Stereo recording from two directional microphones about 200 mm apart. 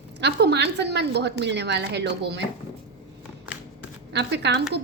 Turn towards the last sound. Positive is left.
turn(degrees=-60)  # may be behind; listen again after turning